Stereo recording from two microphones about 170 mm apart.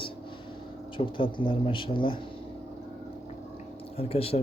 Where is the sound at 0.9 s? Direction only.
30° left (ahead or behind).